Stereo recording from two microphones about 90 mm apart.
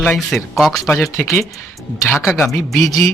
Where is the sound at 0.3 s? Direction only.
Centre (ahead or behind).